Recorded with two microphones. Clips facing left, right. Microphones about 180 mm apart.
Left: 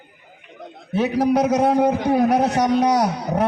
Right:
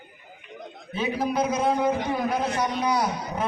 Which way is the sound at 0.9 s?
75° left (ahead or behind).